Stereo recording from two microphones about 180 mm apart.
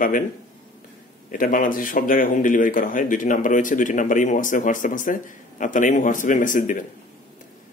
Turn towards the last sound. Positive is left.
turn(degrees=45)  # may be behind; listen again after turning